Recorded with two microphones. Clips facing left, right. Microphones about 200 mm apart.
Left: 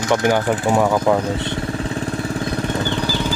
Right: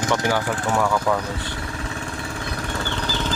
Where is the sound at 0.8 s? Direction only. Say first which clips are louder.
Left 4 dB; 35° left (ahead or behind).